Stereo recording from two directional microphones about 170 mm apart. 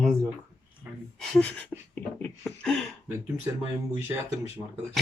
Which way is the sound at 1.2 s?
5° left (ahead or behind).